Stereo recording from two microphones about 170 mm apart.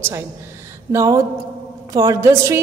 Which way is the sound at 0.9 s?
15° right (ahead or behind).